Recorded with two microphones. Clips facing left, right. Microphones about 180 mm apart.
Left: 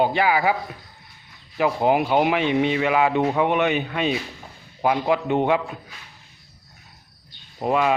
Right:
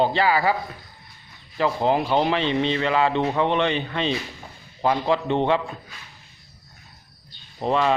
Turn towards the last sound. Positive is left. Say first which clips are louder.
# left 1 dB
turn(degrees=10)  # may be behind; listen again after turning